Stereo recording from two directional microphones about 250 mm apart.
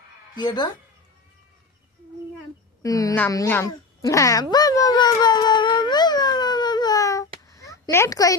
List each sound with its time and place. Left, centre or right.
0.3 s speech: centre
2.8 s speech: centre
4.5 s a sound: centre